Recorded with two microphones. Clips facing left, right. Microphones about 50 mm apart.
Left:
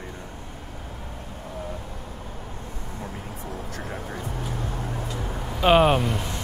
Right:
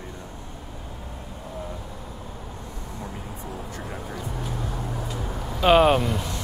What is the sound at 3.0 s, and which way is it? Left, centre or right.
Speech, left.